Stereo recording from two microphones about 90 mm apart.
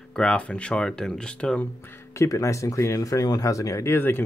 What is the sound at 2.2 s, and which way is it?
Speech, 35° left (ahead or behind).